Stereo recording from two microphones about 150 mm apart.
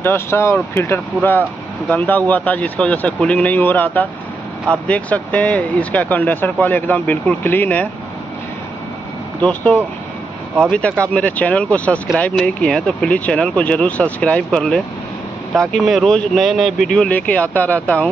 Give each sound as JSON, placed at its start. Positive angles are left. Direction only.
{"t": 0.0, "sound": "speech", "side_deg": 15}
{"t": 9.4, "sound": "speech", "side_deg": 10}